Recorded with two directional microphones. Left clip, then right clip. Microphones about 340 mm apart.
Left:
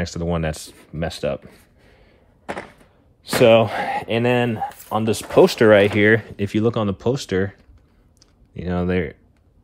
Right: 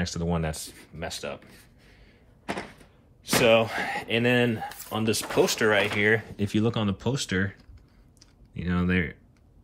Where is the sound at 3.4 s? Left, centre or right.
Left.